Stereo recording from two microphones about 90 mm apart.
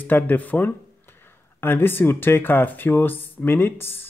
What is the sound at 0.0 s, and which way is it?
Speech, 20° left (ahead or behind).